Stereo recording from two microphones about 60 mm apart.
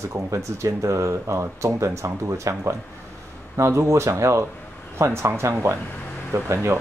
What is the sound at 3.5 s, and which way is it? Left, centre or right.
Speech, right.